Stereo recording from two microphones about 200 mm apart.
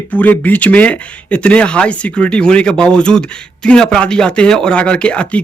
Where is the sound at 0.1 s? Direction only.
10° left (ahead or behind).